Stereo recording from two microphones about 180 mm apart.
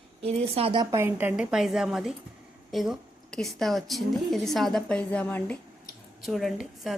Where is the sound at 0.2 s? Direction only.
35° right (ahead or behind).